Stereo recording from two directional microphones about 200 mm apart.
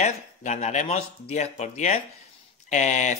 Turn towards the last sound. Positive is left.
turn(degrees=35)  # may be behind; listen again after turning